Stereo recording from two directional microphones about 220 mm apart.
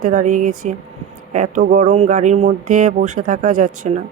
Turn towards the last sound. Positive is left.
turn(degrees=-35)  # may be behind; listen again after turning